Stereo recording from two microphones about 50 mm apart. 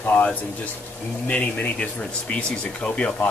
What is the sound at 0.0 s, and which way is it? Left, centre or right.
Speech, left.